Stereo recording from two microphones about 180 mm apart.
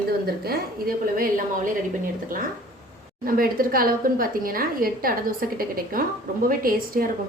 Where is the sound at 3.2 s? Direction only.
55° right (ahead or behind).